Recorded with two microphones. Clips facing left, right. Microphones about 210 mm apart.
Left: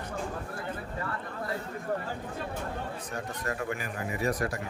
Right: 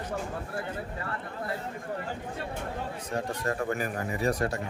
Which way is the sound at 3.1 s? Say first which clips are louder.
Right 7 dB; 30° right (ahead or behind).